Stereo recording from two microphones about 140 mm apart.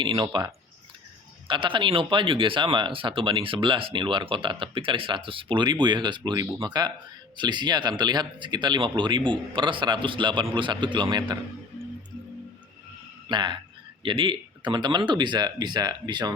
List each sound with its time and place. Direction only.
0.0 s speech: 35° right (ahead or behind)
1.5 s speech: 35° right (ahead or behind)
13.2 s speech: 35° right (ahead or behind)